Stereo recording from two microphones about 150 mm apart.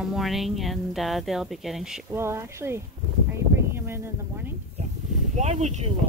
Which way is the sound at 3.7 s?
15° right (ahead or behind).